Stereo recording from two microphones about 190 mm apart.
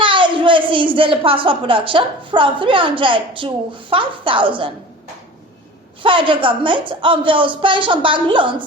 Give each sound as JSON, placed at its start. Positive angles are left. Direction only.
{"t": 0.0, "sound": "a woman's voice", "side_deg": -25}
{"t": 6.0, "sound": "speech", "side_deg": -25}